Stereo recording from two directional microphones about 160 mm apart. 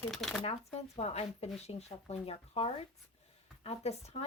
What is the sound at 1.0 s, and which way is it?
Speech, 40° left (ahead or behind).